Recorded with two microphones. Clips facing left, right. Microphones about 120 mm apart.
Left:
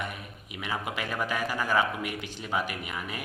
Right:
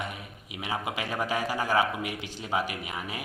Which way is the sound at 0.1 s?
20° right (ahead or behind).